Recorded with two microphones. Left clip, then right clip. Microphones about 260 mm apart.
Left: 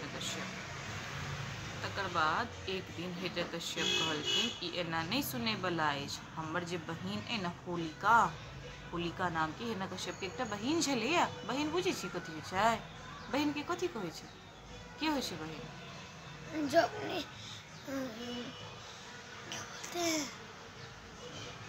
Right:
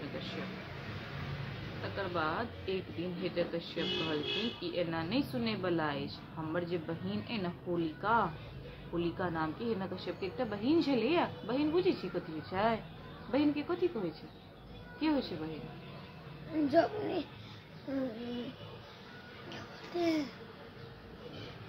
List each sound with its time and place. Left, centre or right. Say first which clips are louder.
1.8 s speech: left 2 dB; centre
16.6 s speech: right 1 dB; centre
19.5 s babbling: even; centre